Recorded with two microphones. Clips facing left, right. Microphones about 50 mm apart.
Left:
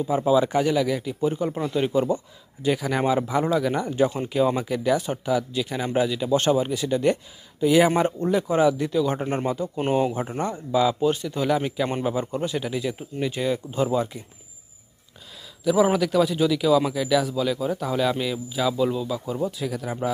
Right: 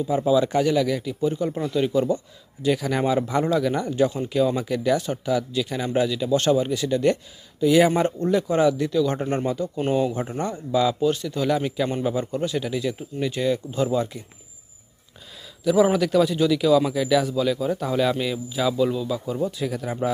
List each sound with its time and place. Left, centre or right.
0.1 s speech: centre
1.2 s speech: left
2.6 s speech: centre
15.6 s speech: centre